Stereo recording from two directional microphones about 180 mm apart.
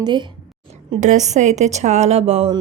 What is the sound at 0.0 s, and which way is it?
Speech, 25° right (ahead or behind).